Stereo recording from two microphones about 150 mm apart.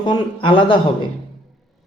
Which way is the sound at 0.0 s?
35° left (ahead or behind).